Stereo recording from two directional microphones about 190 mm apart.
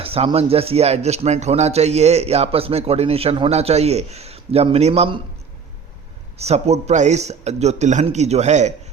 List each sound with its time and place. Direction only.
0.0 s a man's voice: 30° right (ahead or behind)
6.4 s a man's voice: 35° right (ahead or behind)